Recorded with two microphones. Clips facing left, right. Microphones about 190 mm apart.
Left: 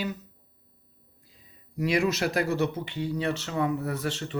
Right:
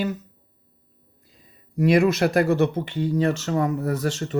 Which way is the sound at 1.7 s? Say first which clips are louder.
Right 7 dB; 55° right (ahead or behind).